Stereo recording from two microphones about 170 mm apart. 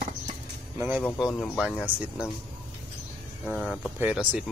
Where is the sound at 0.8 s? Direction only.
15° right (ahead or behind).